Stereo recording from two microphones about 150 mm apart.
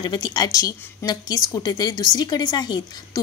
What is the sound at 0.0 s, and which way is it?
A woman's voice, 25° left (ahead or behind).